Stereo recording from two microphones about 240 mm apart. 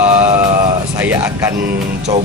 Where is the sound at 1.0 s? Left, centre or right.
Centre.